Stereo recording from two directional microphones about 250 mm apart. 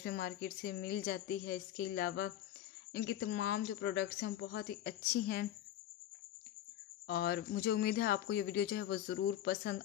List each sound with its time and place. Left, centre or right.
0.0 s speech: left
7.1 s speech: left